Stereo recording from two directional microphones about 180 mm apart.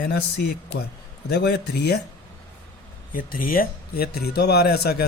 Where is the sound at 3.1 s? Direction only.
50° left (ahead or behind).